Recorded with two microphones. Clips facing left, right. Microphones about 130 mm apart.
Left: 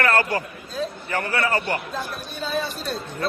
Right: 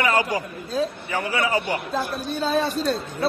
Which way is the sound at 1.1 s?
10° right (ahead or behind).